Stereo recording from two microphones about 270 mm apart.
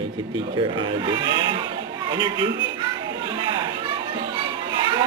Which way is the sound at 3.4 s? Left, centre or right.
Centre.